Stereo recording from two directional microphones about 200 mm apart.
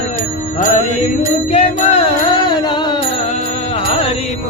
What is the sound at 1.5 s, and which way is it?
Music, 30° left (ahead or behind).